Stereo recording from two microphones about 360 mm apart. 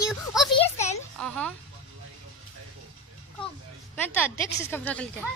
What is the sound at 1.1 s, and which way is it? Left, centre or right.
Speech, centre.